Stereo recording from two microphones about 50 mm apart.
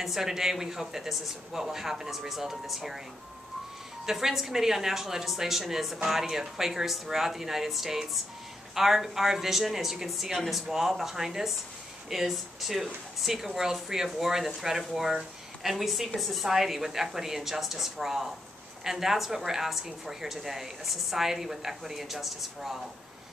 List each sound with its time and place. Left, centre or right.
0.0 s a woman's voice: centre
4.0 s a woman's voice: centre